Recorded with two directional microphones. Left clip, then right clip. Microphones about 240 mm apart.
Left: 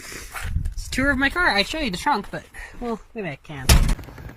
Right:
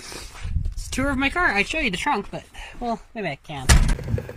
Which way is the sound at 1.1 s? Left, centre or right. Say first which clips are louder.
Left 2 dB; centre.